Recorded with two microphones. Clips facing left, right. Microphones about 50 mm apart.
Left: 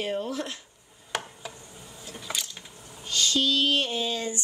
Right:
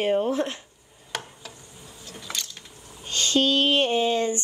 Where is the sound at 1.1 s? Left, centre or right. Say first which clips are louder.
Left 1 dB; centre.